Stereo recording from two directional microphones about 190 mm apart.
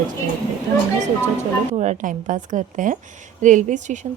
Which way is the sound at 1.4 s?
40° right (ahead or behind).